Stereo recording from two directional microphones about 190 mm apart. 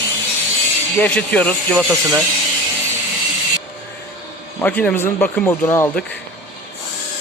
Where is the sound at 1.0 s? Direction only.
5° left (ahead or behind).